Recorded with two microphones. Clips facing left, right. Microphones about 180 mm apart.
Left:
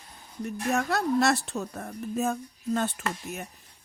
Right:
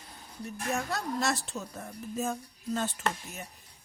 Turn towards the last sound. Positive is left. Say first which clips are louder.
# left 1 dB
turn(degrees=60)  # may be behind; listen again after turning